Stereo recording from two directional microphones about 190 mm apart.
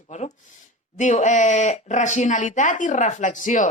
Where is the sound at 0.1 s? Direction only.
35° left (ahead or behind).